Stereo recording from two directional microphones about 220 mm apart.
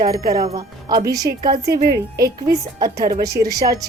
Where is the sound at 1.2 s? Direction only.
40° right (ahead or behind).